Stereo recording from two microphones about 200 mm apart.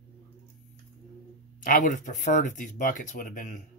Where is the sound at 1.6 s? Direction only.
40° left (ahead or behind).